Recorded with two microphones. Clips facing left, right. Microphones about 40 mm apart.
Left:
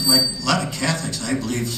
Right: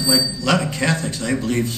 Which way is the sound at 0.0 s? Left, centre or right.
Right.